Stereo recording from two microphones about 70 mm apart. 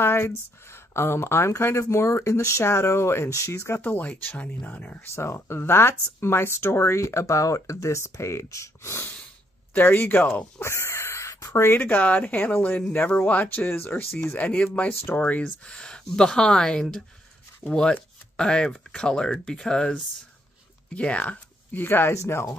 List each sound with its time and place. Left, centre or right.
0.0 s speech: left
3.8 s speech: left
5.0 s speech: left
9.8 s speech: left
10.6 s speech: left
22.1 s speech: left